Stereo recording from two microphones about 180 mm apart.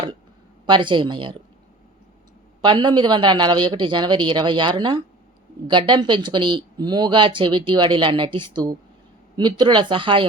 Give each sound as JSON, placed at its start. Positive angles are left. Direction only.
{"t": 0.6, "sound": "speech", "side_deg": -25}
{"t": 2.6, "sound": "speech", "side_deg": -25}